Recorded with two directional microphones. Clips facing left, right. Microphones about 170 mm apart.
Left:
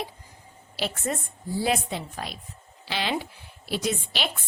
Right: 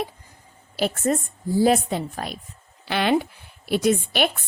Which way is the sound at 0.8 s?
45° right (ahead or behind).